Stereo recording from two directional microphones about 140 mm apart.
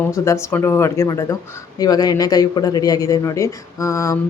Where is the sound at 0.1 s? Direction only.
20° left (ahead or behind).